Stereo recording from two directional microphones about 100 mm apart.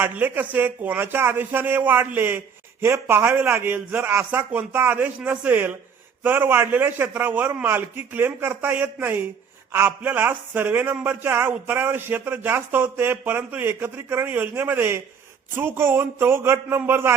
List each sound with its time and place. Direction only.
0.0 s a man's voice: 15° right (ahead or behind)